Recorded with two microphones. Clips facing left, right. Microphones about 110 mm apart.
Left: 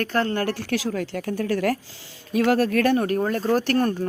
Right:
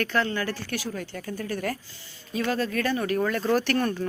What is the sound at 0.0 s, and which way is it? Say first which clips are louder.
A woman's voice: left 3 dB; 45° left (ahead or behind).